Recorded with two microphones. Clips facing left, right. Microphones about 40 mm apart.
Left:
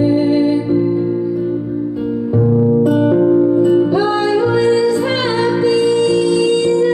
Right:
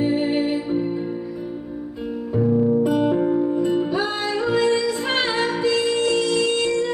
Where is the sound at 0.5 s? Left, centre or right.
Centre.